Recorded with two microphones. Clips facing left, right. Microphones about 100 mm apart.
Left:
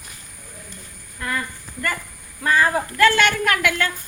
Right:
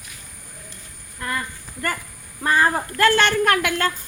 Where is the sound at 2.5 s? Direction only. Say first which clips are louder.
Even; 35° right (ahead or behind).